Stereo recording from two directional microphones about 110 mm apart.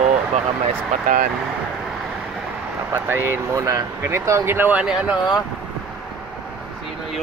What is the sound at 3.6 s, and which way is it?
Speech, 30° right (ahead or behind).